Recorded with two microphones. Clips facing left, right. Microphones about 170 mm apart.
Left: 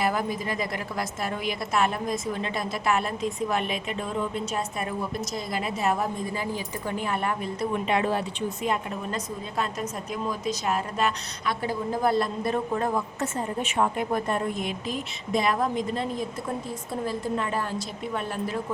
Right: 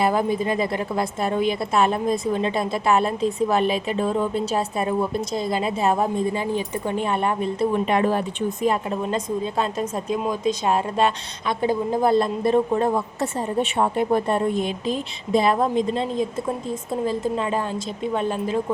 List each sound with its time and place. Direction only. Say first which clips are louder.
0.0 s speech: right 6 dB; 25° right (ahead or behind)
7.9 s speech: right 4 dB; 45° right (ahead or behind)
9.6 s speech: right 6 dB; 25° right (ahead or behind)